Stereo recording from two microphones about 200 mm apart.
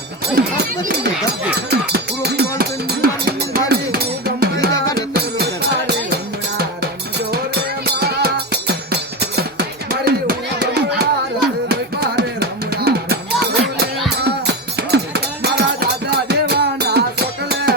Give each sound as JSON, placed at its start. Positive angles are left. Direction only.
{"t": 0.3, "sound": "run", "side_deg": -50}
{"t": 1.7, "sound": "music", "side_deg": -50}
{"t": 7.9, "sound": "music", "side_deg": -55}
{"t": 14.3, "sound": "music", "side_deg": -55}